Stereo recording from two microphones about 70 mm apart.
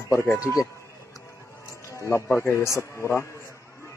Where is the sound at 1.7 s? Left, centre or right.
Left.